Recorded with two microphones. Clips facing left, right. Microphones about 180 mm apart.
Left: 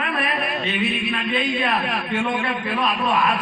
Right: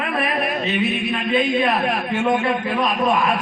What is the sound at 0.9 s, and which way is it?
A man's voice, 45° right (ahead or behind).